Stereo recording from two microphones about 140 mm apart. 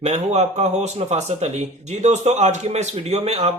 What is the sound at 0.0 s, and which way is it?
Speech, 55° right (ahead or behind).